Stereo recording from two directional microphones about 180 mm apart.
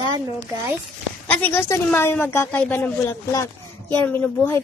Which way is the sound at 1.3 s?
10° left (ahead or behind).